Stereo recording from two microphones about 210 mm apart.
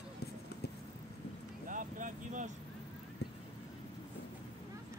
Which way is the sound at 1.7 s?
40° right (ahead or behind).